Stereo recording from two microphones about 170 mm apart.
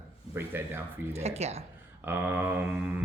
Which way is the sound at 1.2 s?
40° right (ahead or behind).